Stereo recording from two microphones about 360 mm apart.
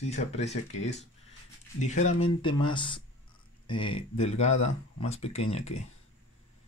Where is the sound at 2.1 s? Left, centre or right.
Centre.